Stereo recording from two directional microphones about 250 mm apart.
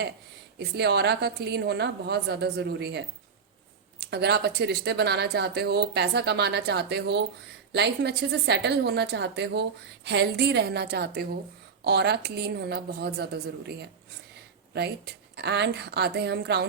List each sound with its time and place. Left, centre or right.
0.8 s a woman's voice: right
4.1 s a woman's voice: right